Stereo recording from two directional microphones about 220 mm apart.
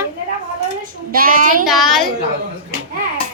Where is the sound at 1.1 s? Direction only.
40° right (ahead or behind).